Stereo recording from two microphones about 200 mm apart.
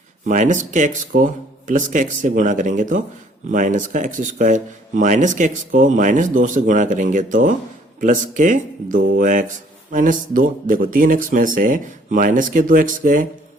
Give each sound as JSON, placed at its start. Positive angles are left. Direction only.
{"t": 0.3, "sound": "speech", "side_deg": -40}